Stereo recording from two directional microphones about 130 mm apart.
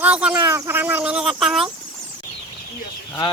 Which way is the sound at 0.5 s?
20° right (ahead or behind).